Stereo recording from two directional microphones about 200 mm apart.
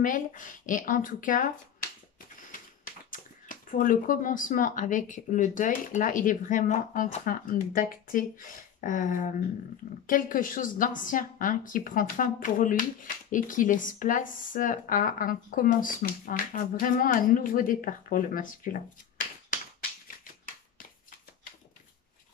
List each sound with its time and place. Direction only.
0.0 s speech: 40° left (ahead or behind)
2.5 s typewriter: 45° left (ahead or behind)
3.1 s a woman's voice: 40° left (ahead or behind)